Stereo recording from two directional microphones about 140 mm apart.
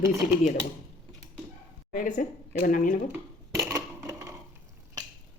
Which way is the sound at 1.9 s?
65° left (ahead or behind).